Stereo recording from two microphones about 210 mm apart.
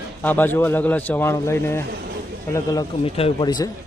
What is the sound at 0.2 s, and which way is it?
Speech, 10° left (ahead or behind).